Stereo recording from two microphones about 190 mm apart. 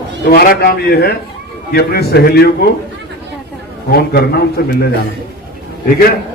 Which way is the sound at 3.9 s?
55° left (ahead or behind).